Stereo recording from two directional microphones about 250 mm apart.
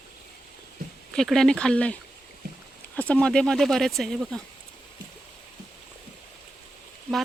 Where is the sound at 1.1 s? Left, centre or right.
Centre.